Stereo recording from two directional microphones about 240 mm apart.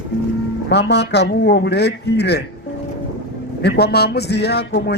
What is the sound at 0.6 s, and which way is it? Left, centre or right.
A man's voice, left.